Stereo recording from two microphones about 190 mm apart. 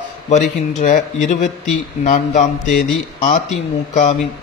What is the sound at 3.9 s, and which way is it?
Speech, 35° left (ahead or behind).